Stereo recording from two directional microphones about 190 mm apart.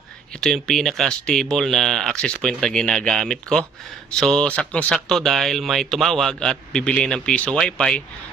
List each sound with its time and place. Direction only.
0.4 s speech: centre (ahead or behind)